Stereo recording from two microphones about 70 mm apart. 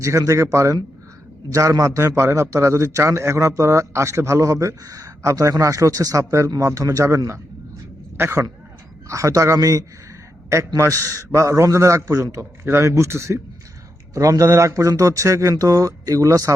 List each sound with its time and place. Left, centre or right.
0.0 s a man's voice: right
9.0 s a man's voice: right